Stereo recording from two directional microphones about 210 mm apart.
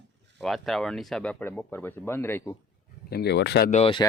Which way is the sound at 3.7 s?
25° left (ahead or behind).